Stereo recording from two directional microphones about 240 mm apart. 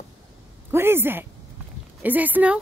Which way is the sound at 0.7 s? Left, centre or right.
Centre.